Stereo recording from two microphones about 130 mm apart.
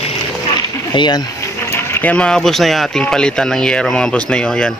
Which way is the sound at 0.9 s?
35° left (ahead or behind).